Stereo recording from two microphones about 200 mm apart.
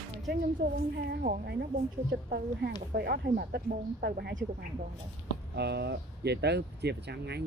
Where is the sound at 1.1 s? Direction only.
45° right (ahead or behind).